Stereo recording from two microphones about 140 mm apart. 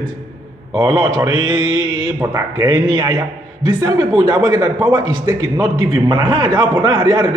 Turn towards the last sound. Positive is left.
turn(degrees=-30)  # may be behind; listen again after turning